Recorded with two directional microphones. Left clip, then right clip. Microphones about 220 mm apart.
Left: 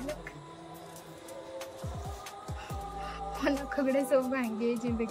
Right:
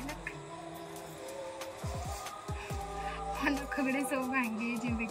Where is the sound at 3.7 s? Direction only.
15° left (ahead or behind).